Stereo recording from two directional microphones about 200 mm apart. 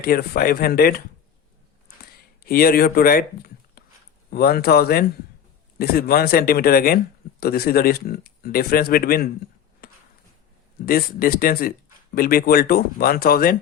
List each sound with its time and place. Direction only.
0.0 s speech: 50° left (ahead or behind)
2.5 s speech: 50° left (ahead or behind)
9.8 s a sound: 50° left (ahead or behind)
10.8 s speech: 45° left (ahead or behind)